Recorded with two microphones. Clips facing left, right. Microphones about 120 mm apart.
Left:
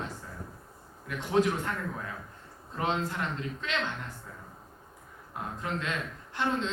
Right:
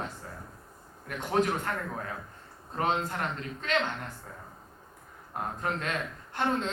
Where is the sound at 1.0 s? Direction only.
50° right (ahead or behind).